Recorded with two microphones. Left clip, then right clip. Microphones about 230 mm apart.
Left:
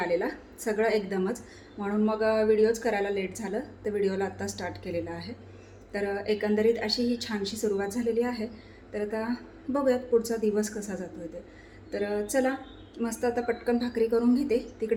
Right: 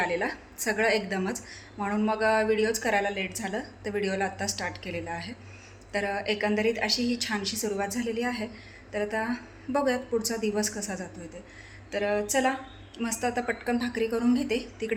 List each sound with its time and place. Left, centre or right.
0.0 s a woman's voice: centre